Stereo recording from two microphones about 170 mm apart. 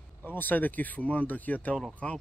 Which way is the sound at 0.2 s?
10° left (ahead or behind).